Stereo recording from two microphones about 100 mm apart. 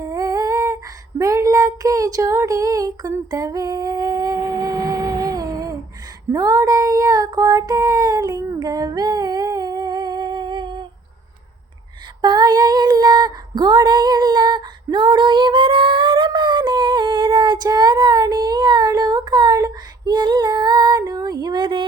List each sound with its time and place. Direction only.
0.0 s humming: 35° right (ahead or behind)
1.2 s child singing: 35° right (ahead or behind); by 10.8 s 50° right (ahead or behind)
12.2 s female singing: 45° right (ahead or behind)